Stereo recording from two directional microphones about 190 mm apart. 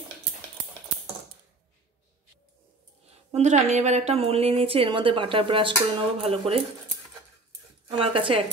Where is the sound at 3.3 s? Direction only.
35° right (ahead or behind).